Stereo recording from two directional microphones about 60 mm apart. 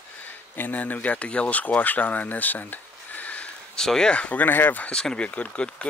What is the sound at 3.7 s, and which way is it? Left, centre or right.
Speech, centre.